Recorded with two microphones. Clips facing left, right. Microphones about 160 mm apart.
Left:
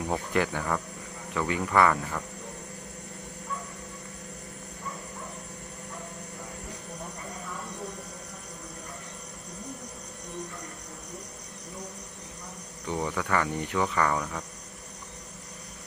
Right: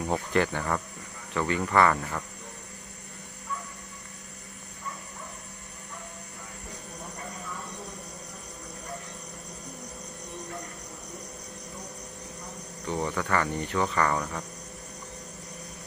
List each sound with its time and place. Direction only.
0.3 s cricket: 10° left (ahead or behind)
1.3 s speech: 5° left (ahead or behind)
12.8 s cricket: 10° left (ahead or behind)